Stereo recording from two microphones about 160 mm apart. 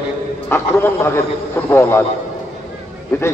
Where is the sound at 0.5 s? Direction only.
15° left (ahead or behind).